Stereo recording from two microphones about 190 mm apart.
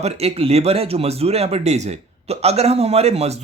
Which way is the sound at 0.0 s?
35° right (ahead or behind).